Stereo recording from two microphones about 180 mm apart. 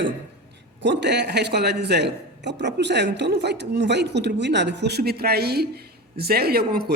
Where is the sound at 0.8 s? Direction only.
75° right (ahead or behind).